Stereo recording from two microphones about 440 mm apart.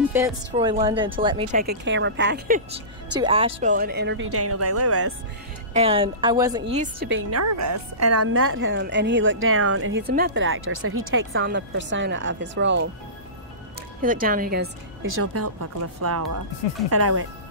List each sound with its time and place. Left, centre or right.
0.0 s a woman's voice: centre; by 5.1 s right
5.7 s a woman's voice: centre
6.6 s a woman's voice: centre
14.0 s a woman's voice: centre